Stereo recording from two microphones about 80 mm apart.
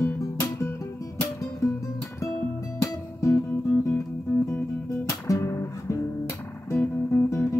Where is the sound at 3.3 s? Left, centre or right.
Left.